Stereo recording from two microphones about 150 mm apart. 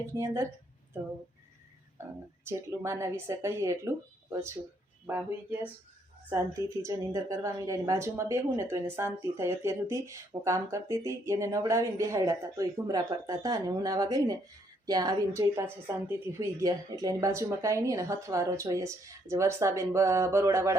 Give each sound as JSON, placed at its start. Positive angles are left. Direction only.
{"t": 0.1, "sound": "a woman's voice", "side_deg": -20}
{"t": 2.0, "sound": "a woman's voice", "side_deg": -15}